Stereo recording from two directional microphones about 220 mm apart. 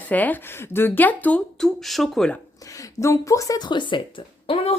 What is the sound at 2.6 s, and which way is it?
Speech, 15° left (ahead or behind).